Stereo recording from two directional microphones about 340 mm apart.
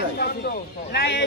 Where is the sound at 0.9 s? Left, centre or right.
Left.